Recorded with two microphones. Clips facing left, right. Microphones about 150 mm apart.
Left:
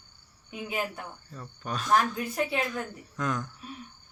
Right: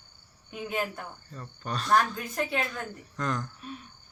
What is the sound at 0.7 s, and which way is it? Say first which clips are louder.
Speech: right 1 dB; 5° left (ahead or behind).